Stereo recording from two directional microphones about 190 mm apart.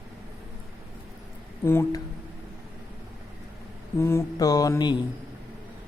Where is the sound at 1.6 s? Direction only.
15° left (ahead or behind).